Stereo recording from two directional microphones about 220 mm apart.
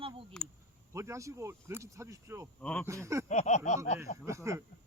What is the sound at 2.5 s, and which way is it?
Speech, 5° left (ahead or behind).